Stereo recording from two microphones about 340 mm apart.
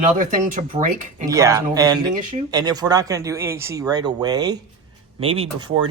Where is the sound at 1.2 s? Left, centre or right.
Centre.